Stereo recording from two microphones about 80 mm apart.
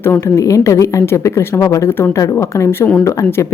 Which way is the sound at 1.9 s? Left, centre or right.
Left.